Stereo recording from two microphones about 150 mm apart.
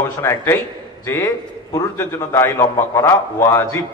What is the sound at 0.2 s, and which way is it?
A man's voice, 15° left (ahead or behind).